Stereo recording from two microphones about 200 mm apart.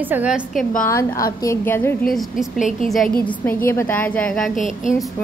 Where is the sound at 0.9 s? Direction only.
15° left (ahead or behind).